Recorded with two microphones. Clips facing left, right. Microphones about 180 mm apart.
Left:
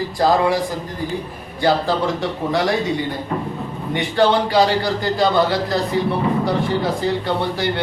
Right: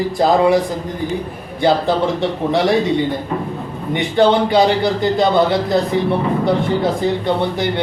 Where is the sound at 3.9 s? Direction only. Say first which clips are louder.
Right 3 dB; 20° right (ahead or behind).